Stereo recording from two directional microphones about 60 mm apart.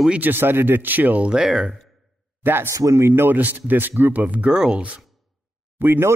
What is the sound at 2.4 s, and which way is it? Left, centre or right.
Speech, right.